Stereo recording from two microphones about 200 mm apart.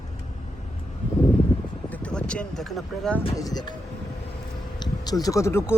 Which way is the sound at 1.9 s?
5° left (ahead or behind).